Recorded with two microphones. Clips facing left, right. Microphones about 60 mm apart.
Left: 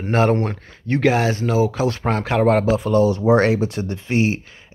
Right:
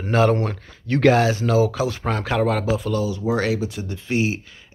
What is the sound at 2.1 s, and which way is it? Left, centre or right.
Speech, left.